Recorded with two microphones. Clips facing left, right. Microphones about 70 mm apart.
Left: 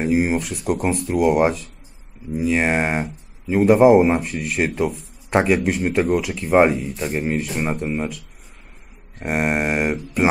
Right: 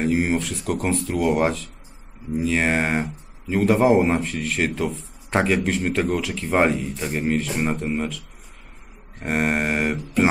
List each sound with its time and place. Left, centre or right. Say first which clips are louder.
0.1 s speech: left 2 dB; centre
6.7 s speech: left 1 dB; left
7.0 s speech: left 1 dB; centre
7.5 s speech: left 1 dB; centre
9.2 s speech: left 1 dB; centre